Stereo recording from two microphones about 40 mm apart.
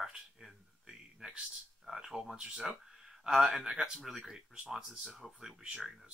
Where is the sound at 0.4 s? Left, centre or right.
Centre.